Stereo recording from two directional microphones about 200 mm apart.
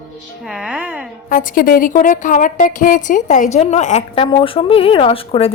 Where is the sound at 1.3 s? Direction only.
45° left (ahead or behind).